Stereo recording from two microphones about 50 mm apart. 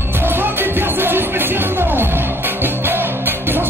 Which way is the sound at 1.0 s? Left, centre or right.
Right.